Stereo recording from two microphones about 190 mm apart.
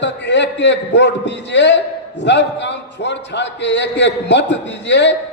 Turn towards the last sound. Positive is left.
turn(degrees=65)  # may be behind; listen again after turning